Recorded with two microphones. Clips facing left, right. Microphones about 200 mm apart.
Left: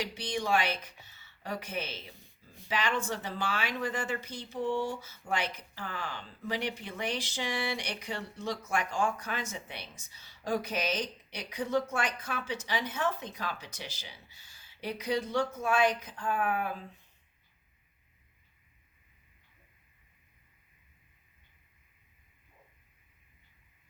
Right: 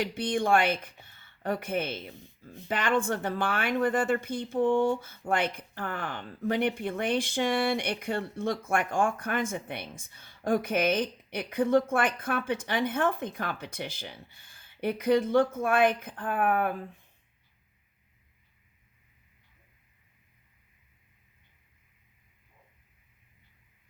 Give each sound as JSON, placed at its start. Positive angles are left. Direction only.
{"t": 0.0, "sound": "speech", "side_deg": -55}